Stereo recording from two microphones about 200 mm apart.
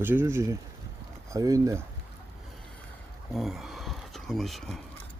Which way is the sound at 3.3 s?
Centre (ahead or behind).